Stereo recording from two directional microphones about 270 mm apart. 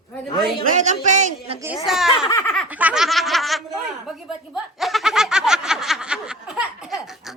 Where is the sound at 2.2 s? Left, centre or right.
Centre.